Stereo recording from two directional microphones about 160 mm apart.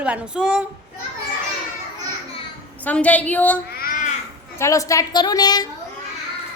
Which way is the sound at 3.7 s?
65° left (ahead or behind).